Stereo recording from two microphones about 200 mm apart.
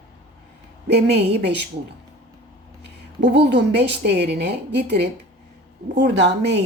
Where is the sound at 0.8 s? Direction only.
55° right (ahead or behind).